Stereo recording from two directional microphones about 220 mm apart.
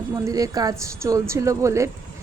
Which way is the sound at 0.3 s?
15° right (ahead or behind).